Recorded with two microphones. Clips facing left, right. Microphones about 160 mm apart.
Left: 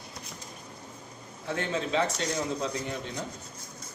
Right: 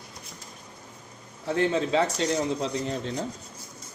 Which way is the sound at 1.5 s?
35° right (ahead or behind).